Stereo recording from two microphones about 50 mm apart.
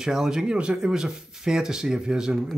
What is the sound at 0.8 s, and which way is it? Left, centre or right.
Speech, centre.